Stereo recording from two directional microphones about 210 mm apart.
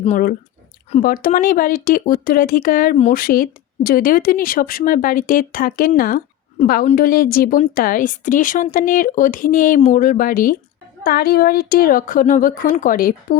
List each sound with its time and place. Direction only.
0.0 s a woman's voice: 40° left (ahead or behind)